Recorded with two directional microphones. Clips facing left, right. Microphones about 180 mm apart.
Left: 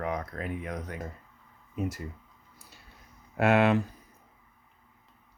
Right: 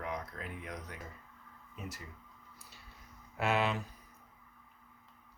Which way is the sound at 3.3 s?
60° left (ahead or behind).